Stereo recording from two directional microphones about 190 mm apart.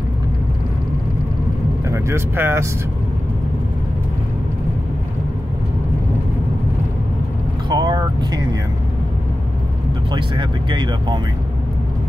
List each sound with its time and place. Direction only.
1.9 s speech: 15° right (ahead or behind)
7.7 s vehicle: 20° right (ahead or behind)
10.1 s speech: 25° right (ahead or behind)